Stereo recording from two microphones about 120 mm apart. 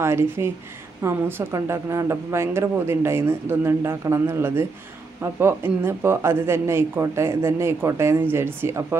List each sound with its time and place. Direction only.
0.0 s a woman's voice: 20° right (ahead or behind)